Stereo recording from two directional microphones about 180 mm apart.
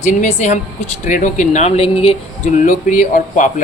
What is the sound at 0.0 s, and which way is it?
Speech, 40° left (ahead or behind).